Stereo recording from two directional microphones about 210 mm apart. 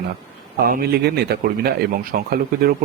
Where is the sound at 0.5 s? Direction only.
45° right (ahead or behind).